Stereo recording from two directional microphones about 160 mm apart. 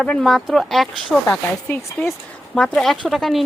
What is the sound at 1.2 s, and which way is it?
Speech, 15° left (ahead or behind).